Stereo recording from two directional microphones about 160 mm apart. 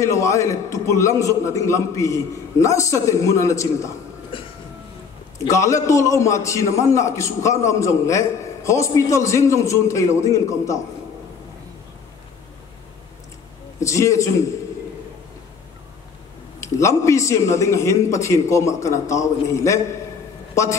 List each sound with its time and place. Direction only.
0.0 s a man's voice: 20° left (ahead or behind)
4.3 s train: 30° left (ahead or behind)
5.4 s a man's voice: 20° left (ahead or behind)
13.7 s a man's voice: 20° left (ahead or behind)
16.5 s a man's voice: 20° left (ahead or behind)